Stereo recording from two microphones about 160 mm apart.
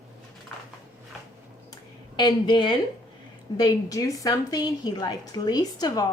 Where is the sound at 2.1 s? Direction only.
30° left (ahead or behind).